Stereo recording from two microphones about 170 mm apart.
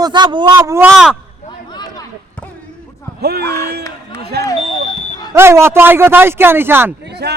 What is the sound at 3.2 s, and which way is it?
Speech, 70° right (ahead or behind).